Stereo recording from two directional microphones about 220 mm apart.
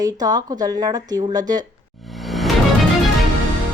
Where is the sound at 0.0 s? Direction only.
15° right (ahead or behind).